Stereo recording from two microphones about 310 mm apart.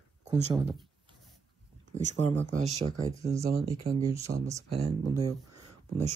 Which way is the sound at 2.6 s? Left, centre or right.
Centre.